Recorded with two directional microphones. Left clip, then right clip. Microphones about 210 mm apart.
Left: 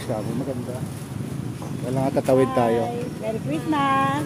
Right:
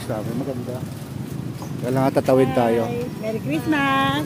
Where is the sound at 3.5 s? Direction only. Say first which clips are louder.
Right 1 dB; 45° right (ahead or behind).